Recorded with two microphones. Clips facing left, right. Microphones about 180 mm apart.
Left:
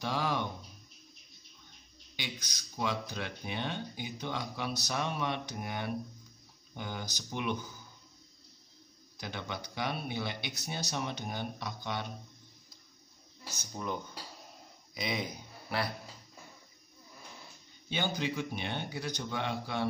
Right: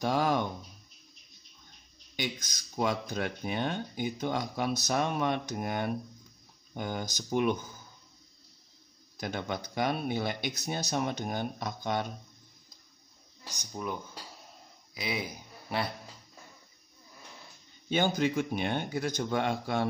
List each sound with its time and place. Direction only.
0.0 s a sound: 45° right (ahead or behind)
2.1 s speech: 45° right (ahead or behind)
9.1 s speech: 45° right (ahead or behind)
13.5 s speech: 15° right (ahead or behind)
15.0 s speech: 5° right (ahead or behind)
17.8 s speech: 50° right (ahead or behind)